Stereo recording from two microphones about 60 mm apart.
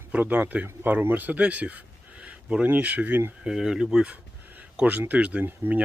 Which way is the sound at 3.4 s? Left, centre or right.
Centre.